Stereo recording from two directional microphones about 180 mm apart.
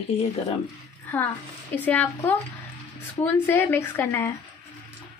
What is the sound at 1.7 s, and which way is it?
A woman's voice, 10° left (ahead or behind).